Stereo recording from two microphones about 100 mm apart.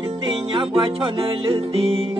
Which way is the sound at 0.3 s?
60° right (ahead or behind).